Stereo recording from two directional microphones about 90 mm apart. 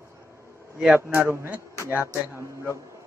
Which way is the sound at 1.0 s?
25° right (ahead or behind).